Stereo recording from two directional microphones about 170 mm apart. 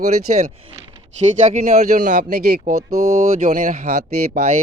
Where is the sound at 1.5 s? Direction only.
40° right (ahead or behind).